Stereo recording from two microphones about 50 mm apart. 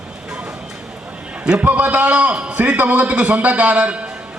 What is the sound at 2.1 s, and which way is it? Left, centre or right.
A man's voice, right.